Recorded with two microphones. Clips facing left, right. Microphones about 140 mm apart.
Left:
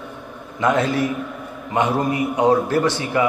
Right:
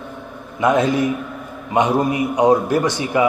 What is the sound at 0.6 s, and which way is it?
A man's voice, 15° right (ahead or behind).